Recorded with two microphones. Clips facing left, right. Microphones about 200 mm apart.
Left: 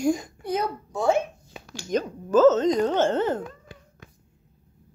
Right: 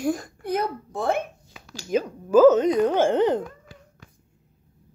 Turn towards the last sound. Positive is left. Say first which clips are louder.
# right 3 dB
turn(degrees=-15)  # may be behind; listen again after turning